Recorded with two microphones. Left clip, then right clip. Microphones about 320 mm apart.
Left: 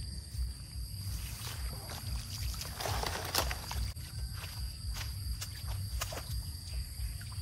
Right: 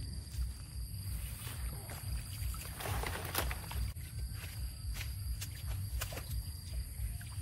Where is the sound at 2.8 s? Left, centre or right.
Left.